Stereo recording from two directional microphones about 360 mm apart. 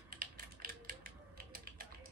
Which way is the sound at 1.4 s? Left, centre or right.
Right.